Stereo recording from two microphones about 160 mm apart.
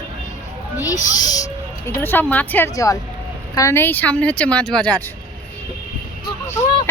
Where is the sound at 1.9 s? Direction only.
15° left (ahead or behind).